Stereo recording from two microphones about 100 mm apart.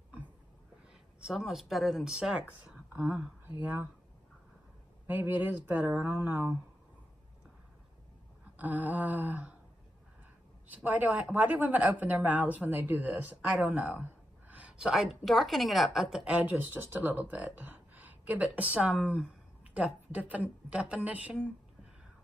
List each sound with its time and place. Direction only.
1.2 s speech: 5° right (ahead or behind)
5.0 s speech: 20° right (ahead or behind)
8.5 s speech: 15° right (ahead or behind)
10.7 s speech: 15° right (ahead or behind)
16.3 s speech: 15° right (ahead or behind)